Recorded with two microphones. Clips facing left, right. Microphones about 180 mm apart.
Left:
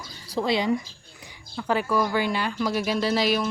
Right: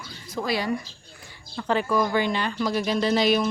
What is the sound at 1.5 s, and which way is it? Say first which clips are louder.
A woman's voice: right 1 dB; 10° left (ahead or behind).